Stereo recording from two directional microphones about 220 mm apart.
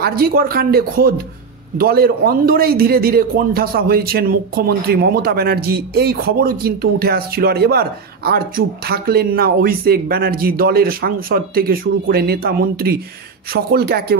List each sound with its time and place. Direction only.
0.0 s a man's voice: 45° right (ahead or behind)